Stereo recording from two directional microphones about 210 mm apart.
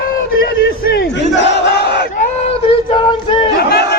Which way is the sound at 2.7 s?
25° left (ahead or behind).